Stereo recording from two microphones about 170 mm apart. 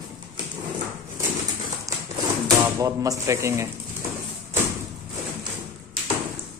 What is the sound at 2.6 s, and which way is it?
Speech, 20° right (ahead or behind).